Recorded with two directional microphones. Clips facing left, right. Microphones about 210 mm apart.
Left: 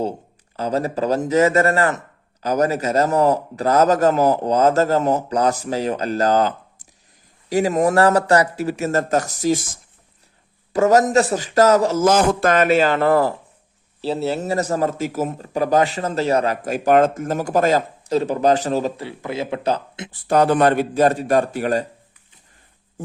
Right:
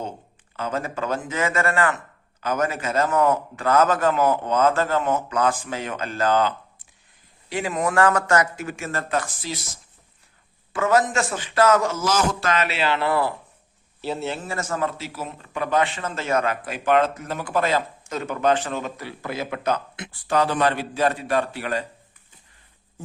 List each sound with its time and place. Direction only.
0.5 s speech: 35° left (ahead or behind)
7.5 s speech: 40° left (ahead or behind)
12.0 s a man's voice: 55° left (ahead or behind); by 20.3 s 30° left (ahead or behind)
20.3 s a man's voice: 55° left (ahead or behind)